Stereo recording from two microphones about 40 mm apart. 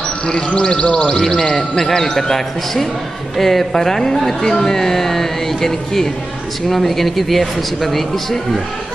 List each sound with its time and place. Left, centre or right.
0.5 s speech: left; by 8.4 s centre